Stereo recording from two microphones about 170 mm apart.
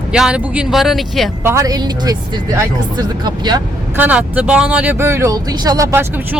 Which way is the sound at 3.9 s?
10° right (ahead or behind).